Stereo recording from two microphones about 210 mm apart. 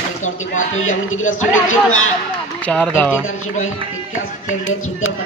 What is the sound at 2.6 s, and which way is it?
Speech, 5° left (ahead or behind).